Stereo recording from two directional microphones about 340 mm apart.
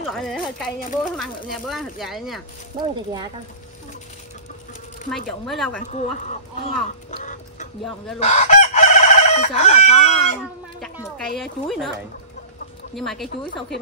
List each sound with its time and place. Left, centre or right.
0.1 s speech: centre
2.8 s speech: centre
5.5 s speech: centre
5.9 s speech: left
8.2 s chicken: centre
11.3 s speech: centre
12.9 s speech: centre